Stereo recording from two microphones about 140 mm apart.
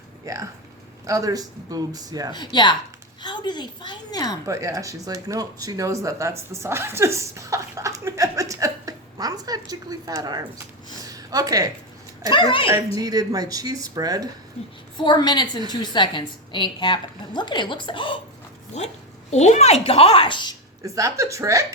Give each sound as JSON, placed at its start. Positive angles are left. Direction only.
{"t": 0.3, "sound": "speech", "side_deg": -25}
{"t": 2.3, "sound": "a woman's voice", "side_deg": 30}
{"t": 4.4, "sound": "speech", "side_deg": -20}
{"t": 11.1, "sound": "a sound", "side_deg": -25}
{"t": 12.3, "sound": "a woman's voice", "side_deg": 35}
{"t": 13.0, "sound": "speech", "side_deg": -25}
{"t": 14.9, "sound": "a woman's voice", "side_deg": 35}
{"t": 19.3, "sound": "a child's voice", "side_deg": 50}
{"t": 20.8, "sound": "speech", "side_deg": -20}